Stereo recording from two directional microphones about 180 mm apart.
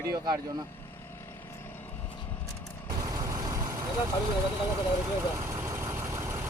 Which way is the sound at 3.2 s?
20° right (ahead or behind).